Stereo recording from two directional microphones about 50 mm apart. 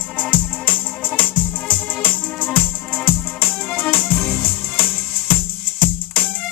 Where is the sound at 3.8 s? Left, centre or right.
Left.